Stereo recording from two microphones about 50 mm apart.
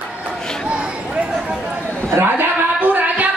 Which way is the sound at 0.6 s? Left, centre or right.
Right.